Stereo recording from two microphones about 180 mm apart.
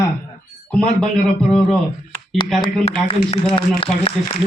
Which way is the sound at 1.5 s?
35° left (ahead or behind).